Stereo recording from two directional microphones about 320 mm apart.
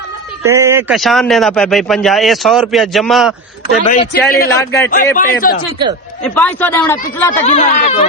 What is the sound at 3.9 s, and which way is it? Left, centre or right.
Speech, left.